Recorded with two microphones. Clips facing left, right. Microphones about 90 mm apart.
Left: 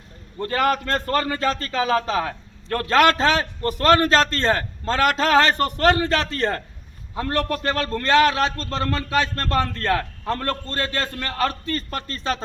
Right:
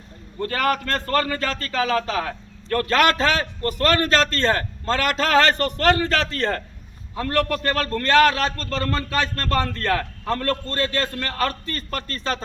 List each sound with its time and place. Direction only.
0.3 s a man's voice: 25° left (ahead or behind)